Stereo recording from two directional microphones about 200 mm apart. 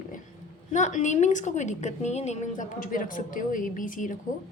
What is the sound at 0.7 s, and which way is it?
A woman's voice, 35° left (ahead or behind).